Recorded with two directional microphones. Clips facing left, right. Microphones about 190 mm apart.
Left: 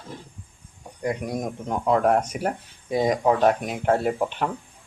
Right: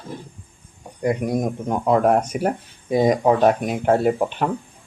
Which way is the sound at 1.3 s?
45° right (ahead or behind).